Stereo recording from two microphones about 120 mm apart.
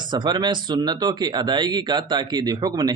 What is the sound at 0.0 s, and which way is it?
Speech, 40° right (ahead or behind).